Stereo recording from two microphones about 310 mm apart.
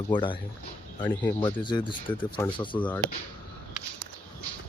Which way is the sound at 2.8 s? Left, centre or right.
Centre.